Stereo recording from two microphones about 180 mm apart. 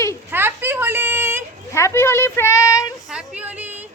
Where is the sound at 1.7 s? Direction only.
15° left (ahead or behind).